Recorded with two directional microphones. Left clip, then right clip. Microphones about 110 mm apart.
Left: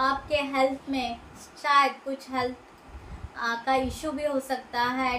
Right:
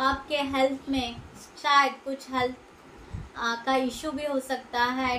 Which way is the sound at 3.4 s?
10° right (ahead or behind).